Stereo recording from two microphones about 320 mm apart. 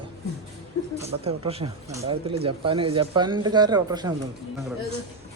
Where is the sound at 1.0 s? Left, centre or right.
Centre.